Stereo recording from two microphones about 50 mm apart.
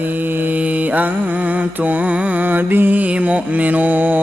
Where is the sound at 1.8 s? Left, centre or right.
Right.